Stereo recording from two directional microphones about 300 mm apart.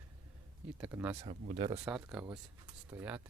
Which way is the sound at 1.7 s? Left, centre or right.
Centre.